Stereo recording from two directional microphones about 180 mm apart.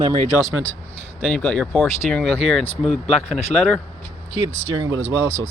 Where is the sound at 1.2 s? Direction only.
5° left (ahead or behind).